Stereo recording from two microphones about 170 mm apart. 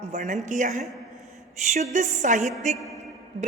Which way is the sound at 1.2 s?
45° right (ahead or behind).